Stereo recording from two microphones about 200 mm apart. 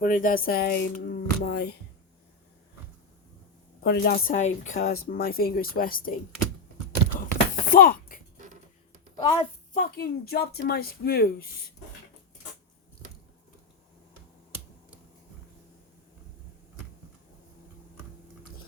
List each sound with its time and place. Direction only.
0.0 s speech: 45° left (ahead or behind)
3.8 s speech: 55° left (ahead or behind)
7.3 s a sound: 45° left (ahead or behind)
9.7 s speech: 45° left (ahead or behind)